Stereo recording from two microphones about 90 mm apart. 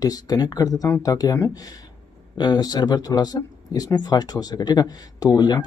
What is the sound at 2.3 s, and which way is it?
Speech, 50° left (ahead or behind).